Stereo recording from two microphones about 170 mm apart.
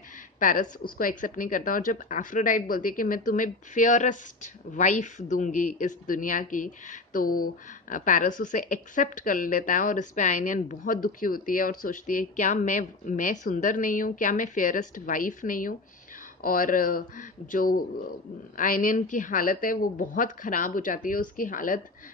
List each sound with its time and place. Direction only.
0.4 s speech: 50° left (ahead or behind)